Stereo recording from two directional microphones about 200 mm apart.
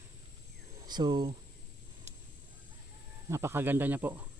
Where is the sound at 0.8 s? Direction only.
20° right (ahead or behind).